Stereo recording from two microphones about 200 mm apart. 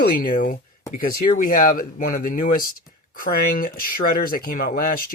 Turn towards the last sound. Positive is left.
turn(degrees=45)  # may be behind; listen again after turning